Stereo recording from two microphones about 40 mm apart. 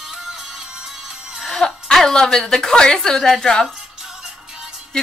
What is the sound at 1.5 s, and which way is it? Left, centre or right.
A woman's voice, centre.